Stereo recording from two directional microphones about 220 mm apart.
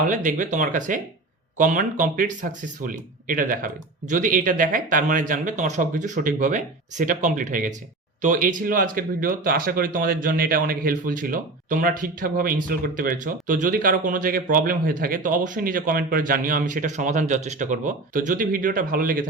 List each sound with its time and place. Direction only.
0.1 s speech: 35° right (ahead or behind)